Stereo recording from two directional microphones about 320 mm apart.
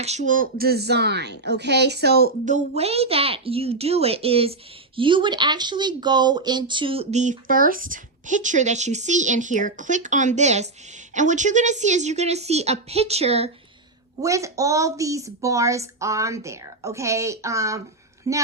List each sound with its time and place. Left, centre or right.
0.0 s a woman's voice: right